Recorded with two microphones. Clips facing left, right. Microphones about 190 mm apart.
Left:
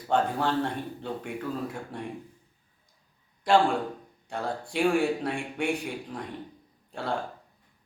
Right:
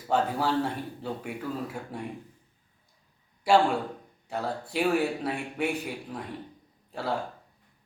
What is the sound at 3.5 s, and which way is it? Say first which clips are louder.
A man's voice: even; 5° right (ahead or behind).